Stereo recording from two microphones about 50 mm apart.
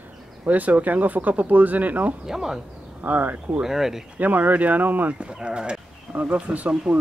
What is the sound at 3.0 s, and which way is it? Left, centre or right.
Speech, right.